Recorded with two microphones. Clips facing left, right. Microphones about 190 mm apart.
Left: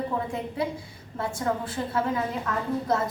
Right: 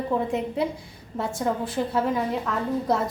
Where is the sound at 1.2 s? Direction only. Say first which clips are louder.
Right 2 dB; 15° right (ahead or behind).